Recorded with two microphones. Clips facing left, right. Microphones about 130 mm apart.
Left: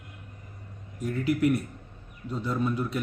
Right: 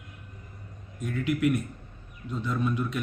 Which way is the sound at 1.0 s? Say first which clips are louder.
Left 1 dB; 35° left (ahead or behind).